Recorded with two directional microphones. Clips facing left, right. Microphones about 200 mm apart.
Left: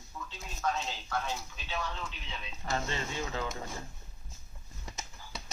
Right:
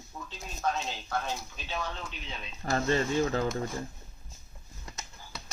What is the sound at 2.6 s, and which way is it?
Speech, 45° right (ahead or behind).